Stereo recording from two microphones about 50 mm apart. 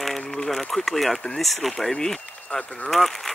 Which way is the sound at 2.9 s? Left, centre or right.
Centre.